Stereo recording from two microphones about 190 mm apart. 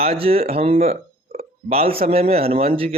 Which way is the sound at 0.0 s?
30° right (ahead or behind).